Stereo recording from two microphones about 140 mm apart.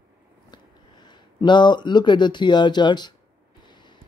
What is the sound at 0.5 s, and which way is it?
Speech, 30° left (ahead or behind).